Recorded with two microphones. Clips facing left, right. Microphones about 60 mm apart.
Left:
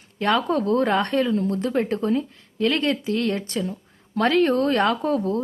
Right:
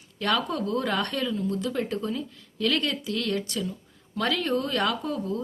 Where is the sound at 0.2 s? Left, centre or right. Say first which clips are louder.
Left 5 dB; left.